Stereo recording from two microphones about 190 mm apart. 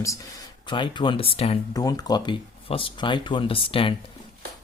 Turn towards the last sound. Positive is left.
turn(degrees=30)  # may be behind; listen again after turning